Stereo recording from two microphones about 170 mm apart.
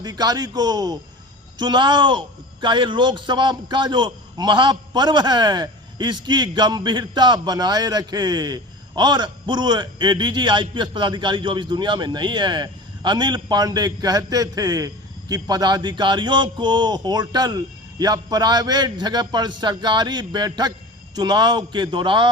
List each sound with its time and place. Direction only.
0.0 s a man's voice: 25° right (ahead or behind)